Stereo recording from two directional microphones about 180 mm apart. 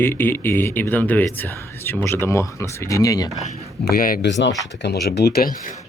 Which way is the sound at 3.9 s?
55° left (ahead or behind).